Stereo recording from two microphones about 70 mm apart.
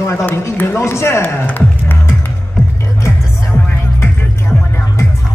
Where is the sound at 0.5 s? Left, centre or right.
Left.